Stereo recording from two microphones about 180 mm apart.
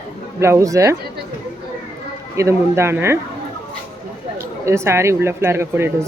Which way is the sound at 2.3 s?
15° right (ahead or behind).